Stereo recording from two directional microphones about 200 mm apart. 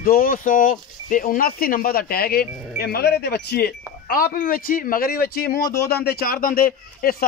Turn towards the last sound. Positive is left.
turn(degrees=45)  # may be behind; listen again after turning